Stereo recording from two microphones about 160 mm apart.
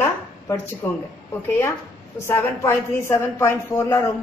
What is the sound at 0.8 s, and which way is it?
Speech, 15° left (ahead or behind).